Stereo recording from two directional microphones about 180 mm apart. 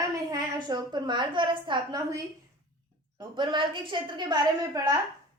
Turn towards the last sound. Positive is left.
turn(degrees=-20)  # may be behind; listen again after turning